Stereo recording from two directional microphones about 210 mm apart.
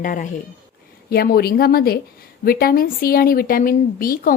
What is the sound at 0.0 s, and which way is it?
A woman's voice, 40° left (ahead or behind).